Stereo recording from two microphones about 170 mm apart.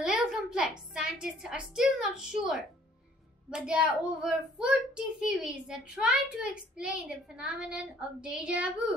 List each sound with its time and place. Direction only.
0.0 s a woman's voice: 5° right (ahead or behind)